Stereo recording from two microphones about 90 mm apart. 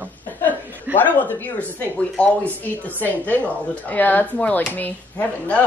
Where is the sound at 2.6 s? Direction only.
20° left (ahead or behind).